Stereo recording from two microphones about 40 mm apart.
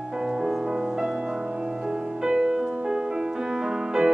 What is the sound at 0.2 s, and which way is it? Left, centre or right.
Music, centre.